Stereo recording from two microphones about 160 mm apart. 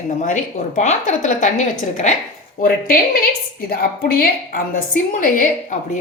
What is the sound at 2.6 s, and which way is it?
A woman's voice, 65° left (ahead or behind).